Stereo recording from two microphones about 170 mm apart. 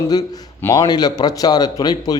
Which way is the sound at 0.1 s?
20° left (ahead or behind).